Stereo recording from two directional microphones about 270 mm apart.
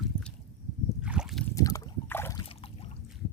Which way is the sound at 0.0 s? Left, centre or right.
Centre.